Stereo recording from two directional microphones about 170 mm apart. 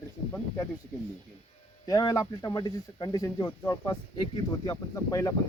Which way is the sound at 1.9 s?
20° left (ahead or behind).